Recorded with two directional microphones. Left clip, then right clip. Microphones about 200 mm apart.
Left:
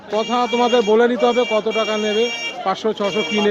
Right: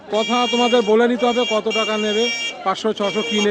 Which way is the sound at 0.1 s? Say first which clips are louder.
Even; 15° right (ahead or behind).